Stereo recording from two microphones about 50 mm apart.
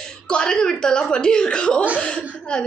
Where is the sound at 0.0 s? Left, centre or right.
Centre.